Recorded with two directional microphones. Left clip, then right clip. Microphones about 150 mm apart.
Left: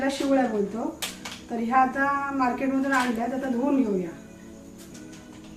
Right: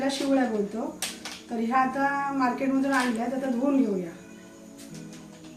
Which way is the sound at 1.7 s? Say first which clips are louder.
Left 3 dB; centre (ahead or behind).